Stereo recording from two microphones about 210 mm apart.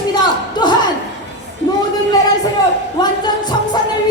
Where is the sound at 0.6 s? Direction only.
20° left (ahead or behind).